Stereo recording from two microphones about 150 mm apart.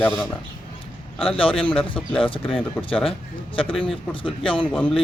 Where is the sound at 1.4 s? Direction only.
35° left (ahead or behind).